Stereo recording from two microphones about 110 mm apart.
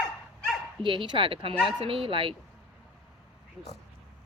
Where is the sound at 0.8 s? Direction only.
45° right (ahead or behind).